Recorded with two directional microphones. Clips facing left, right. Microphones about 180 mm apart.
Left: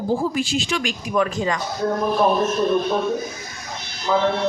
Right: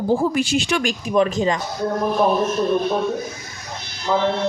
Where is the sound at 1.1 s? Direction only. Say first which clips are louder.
Right 3 dB; 25° right (ahead or behind).